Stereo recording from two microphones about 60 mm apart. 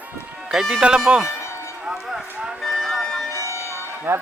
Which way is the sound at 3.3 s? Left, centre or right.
Left.